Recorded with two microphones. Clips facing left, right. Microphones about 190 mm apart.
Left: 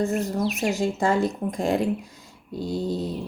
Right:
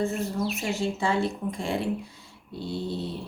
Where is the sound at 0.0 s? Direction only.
40° left (ahead or behind).